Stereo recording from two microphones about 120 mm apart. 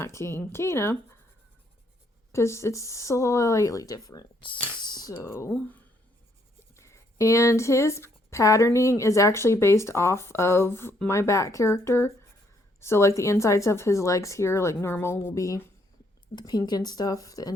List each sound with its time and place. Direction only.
0.0 s speech: 20° left (ahead or behind)
2.3 s speech: 25° left (ahead or behind)
4.8 s a sound: 35° left (ahead or behind)
5.1 s speech: 25° left (ahead or behind)
5.5 s speech: 10° left (ahead or behind)
6.7 s speech: 25° left (ahead or behind)
16.3 s speech: 35° left (ahead or behind)